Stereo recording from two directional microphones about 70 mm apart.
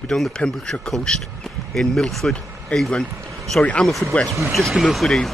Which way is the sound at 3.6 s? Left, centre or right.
Centre.